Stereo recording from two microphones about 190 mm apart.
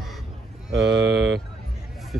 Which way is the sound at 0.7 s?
70° right (ahead or behind).